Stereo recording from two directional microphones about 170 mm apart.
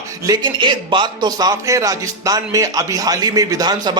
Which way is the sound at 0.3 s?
25° right (ahead or behind).